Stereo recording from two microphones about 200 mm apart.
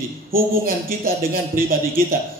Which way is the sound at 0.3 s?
45° right (ahead or behind).